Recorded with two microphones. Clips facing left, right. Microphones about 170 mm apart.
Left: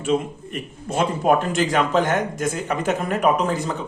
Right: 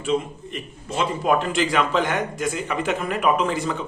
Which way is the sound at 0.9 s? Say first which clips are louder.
Left 3 dB; 50° left (ahead or behind).